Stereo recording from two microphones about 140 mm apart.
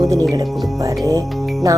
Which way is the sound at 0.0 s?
25° right (ahead or behind).